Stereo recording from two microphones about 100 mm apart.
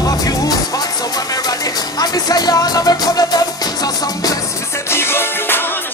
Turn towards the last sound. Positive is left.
turn(degrees=20)  # may be behind; listen again after turning